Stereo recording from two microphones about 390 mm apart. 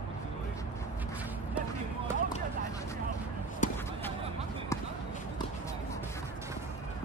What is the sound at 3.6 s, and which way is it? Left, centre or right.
Basketball bounce, centre.